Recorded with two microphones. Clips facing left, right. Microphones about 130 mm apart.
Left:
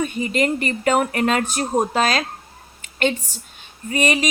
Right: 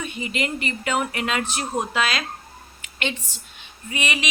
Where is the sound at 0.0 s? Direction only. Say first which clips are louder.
Left 7 dB; 45° left (ahead or behind).